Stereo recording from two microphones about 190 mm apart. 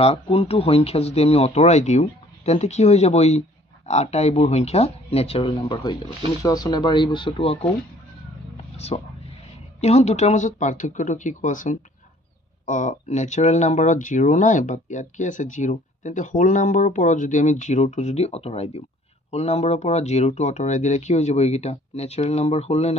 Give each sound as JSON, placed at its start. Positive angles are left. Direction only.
{"t": 0.0, "sound": "speech", "side_deg": 30}
{"t": 8.7, "sound": "speech", "side_deg": 35}